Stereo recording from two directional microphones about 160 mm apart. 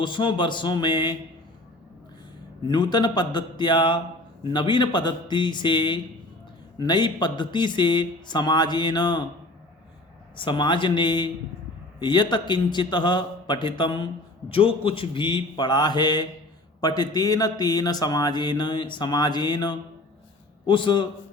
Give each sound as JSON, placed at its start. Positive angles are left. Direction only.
{"t": 0.0, "sound": "speech", "side_deg": 30}
{"t": 2.6, "sound": "speech", "side_deg": 25}
{"t": 10.3, "sound": "a man's voice", "side_deg": 30}